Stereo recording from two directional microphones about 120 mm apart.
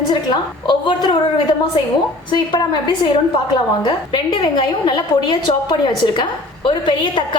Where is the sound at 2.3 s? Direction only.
40° left (ahead or behind).